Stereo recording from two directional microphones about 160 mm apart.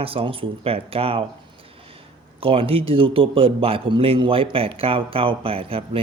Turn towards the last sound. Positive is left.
turn(degrees=-35)  # may be behind; listen again after turning